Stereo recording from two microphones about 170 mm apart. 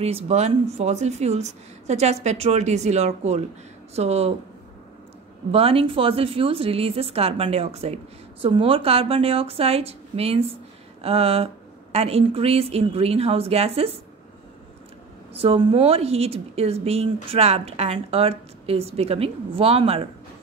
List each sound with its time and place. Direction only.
0.0 s a woman's voice: 40° right (ahead or behind)
5.5 s a woman's voice: 35° right (ahead or behind)
15.3 s a woman's voice: 35° right (ahead or behind)